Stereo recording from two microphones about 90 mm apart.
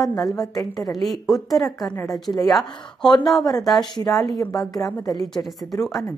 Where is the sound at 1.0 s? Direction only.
Centre (ahead or behind).